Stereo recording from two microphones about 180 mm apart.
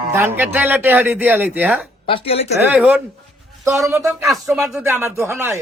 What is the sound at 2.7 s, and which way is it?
Speech, 5° right (ahead or behind).